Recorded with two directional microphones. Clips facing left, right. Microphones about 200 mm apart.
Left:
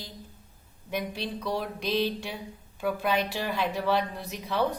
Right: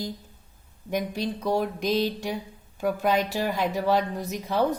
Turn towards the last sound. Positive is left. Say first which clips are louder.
# right 3 dB
turn(degrees=-40)  # may be behind; listen again after turning